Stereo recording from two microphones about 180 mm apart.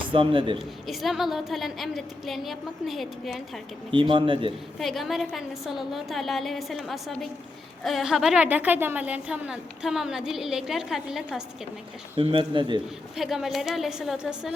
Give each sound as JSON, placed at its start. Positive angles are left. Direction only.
{"t": 0.1, "sound": "speech", "side_deg": -30}
{"t": 0.9, "sound": "a woman's voice", "side_deg": 0}
{"t": 3.9, "sound": "speech", "side_deg": -30}
{"t": 4.8, "sound": "a woman's voice", "side_deg": 0}
{"t": 12.1, "sound": "speech", "side_deg": -30}
{"t": 13.1, "sound": "a woman's voice", "side_deg": 0}